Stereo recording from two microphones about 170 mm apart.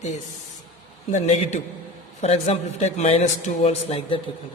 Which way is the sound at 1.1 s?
40° left (ahead or behind).